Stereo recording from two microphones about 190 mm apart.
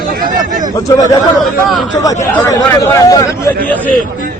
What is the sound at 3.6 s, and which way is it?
Speech, 10° left (ahead or behind).